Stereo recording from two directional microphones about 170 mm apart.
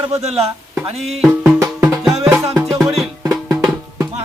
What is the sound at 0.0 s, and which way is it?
Speech, 40° right (ahead or behind).